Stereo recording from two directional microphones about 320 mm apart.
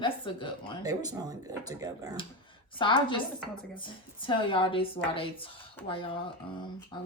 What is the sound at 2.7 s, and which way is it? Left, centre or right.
Speech, centre.